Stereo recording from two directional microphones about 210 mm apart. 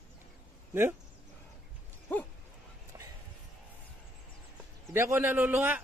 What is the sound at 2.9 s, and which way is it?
Music, 15° right (ahead or behind).